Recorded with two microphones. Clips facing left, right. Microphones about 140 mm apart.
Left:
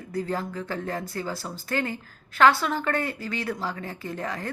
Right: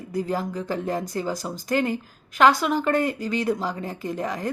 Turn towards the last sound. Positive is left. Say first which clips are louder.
# right 4 dB
turn(degrees=-15)  # may be behind; listen again after turning